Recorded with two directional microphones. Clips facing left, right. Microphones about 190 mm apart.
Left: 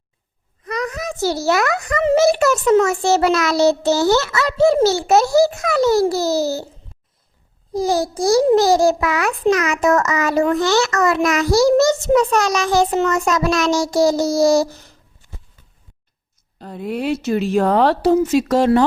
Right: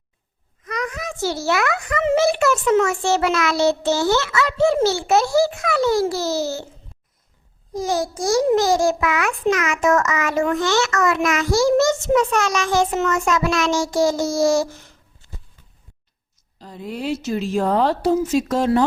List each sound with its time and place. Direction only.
0.6 s a child's voice: 35° left (ahead or behind)
7.7 s a child's voice: 35° left (ahead or behind)
16.6 s a woman's voice: 60° left (ahead or behind)